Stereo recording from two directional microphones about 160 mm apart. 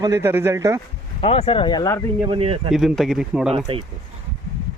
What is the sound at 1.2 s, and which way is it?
Speech, 35° left (ahead or behind).